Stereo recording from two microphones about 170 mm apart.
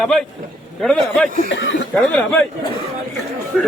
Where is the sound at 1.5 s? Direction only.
90° left.